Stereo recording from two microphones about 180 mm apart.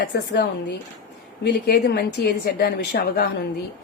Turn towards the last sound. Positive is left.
turn(degrees=60)  # may be behind; listen again after turning